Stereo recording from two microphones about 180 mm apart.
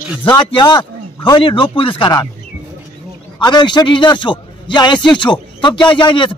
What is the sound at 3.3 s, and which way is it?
A man's voice, 25° left (ahead or behind).